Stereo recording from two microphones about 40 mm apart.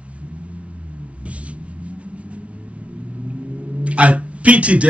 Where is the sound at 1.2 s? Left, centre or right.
Right.